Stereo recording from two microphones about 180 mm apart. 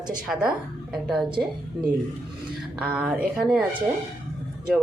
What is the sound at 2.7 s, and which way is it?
Speech, 5° right (ahead or behind).